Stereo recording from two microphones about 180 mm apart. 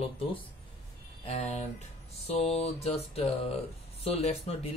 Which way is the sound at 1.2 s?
35° left (ahead or behind).